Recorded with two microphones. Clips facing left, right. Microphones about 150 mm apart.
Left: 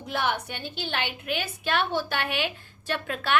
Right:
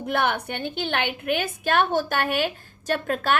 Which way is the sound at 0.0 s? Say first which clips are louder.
Right 4 dB; 55° right (ahead or behind).